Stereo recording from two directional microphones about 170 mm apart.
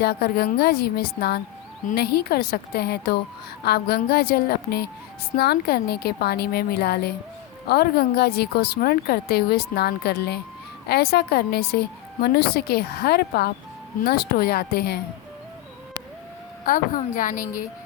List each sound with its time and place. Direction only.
0.0 s a woman's voice: 70° left (ahead or behind)
16.6 s a woman's voice: 55° left (ahead or behind)